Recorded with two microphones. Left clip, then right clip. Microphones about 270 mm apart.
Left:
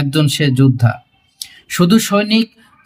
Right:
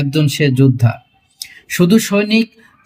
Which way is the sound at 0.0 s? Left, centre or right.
Centre.